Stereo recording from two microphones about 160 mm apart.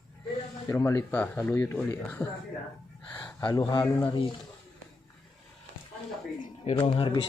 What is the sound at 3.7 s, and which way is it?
Speech, 30° left (ahead or behind).